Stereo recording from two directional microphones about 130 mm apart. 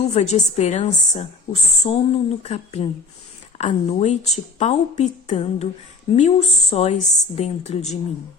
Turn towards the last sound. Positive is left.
turn(degrees=60)  # may be behind; listen again after turning